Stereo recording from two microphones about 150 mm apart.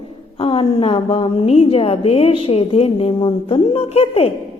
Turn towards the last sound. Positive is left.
turn(degrees=45)  # may be behind; listen again after turning